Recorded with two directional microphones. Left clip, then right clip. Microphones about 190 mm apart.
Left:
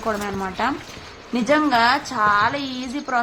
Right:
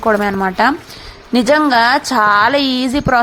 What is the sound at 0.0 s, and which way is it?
A woman's voice, 35° right (ahead or behind).